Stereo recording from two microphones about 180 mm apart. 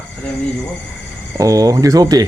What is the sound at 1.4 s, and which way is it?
Speech, 20° right (ahead or behind).